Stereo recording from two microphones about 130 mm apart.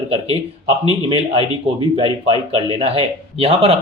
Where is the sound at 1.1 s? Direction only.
45° right (ahead or behind).